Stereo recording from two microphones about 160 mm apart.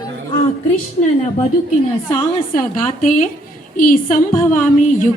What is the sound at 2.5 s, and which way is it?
A woman's voice, 60° left (ahead or behind).